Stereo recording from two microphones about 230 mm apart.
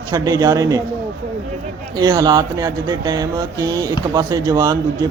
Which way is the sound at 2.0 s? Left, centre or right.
Centre.